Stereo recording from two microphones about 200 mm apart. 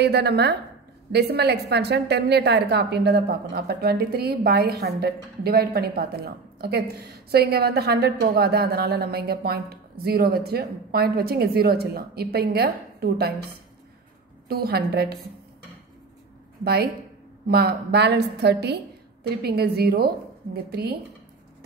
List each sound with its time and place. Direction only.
0.0 s a woman's voice: 55° right (ahead or behind)
14.5 s a woman's voice: 50° right (ahead or behind)
16.6 s a woman's voice: 50° right (ahead or behind)